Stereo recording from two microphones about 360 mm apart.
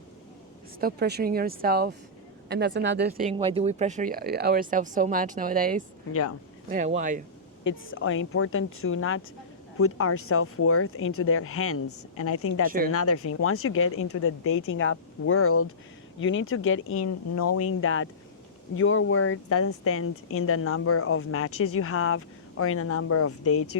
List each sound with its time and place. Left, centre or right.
0.8 s speech: right
7.6 s speech: left
12.6 s speech: right
12.9 s speech: left